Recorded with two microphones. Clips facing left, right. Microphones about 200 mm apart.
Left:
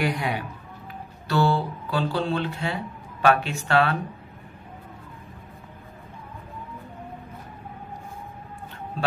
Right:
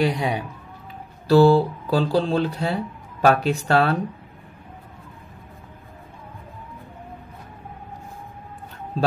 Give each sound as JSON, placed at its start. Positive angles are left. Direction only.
{"t": 0.1, "sound": "speech", "side_deg": -20}
{"t": 1.3, "sound": "speech", "side_deg": -35}